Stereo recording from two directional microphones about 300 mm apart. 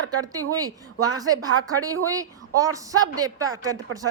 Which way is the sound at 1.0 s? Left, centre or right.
Centre.